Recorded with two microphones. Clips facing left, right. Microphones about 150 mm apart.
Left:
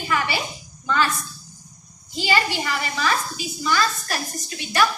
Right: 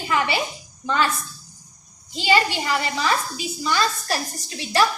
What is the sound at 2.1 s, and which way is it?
A woman's voice, 25° right (ahead or behind).